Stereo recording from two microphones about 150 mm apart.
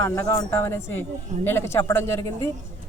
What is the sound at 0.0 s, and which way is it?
Speech, 20° left (ahead or behind).